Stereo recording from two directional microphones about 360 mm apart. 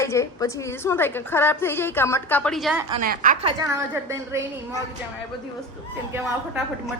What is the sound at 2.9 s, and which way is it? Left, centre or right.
Speech, right.